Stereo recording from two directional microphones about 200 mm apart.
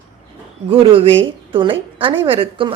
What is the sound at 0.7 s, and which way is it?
A woman's voice, 30° right (ahead or behind).